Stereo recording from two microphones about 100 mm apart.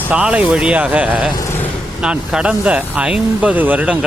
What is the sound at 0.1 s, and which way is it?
Speech, 10° right (ahead or behind).